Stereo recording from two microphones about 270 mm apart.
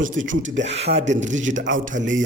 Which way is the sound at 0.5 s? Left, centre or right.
Right.